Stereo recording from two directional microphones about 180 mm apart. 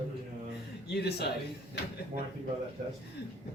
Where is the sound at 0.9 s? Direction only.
65° left (ahead or behind).